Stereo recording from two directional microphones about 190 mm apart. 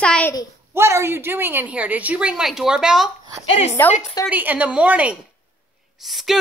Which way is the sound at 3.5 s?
35° left (ahead or behind).